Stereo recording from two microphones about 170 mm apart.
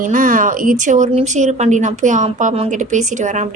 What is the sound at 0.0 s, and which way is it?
A woman's voice, 50° right (ahead or behind).